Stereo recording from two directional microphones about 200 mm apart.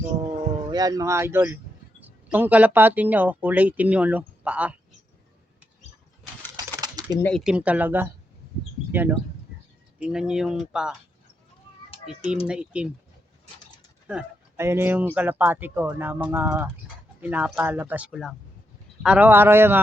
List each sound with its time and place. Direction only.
0.7 s speech: 20° right (ahead or behind)
6.7 s a sound: 20° right (ahead or behind)
7.2 s speech: 5° left (ahead or behind)
7.4 s speech: 5° right (ahead or behind)
12.5 s speech: 5° right (ahead or behind)
14.1 s speech: 10° right (ahead or behind)